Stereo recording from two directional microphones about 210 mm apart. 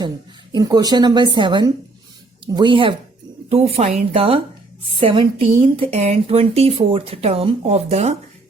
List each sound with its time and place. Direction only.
0.5 s speech: 20° right (ahead or behind)